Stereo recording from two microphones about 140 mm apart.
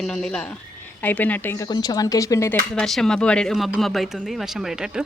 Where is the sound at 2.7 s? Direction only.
5° left (ahead or behind).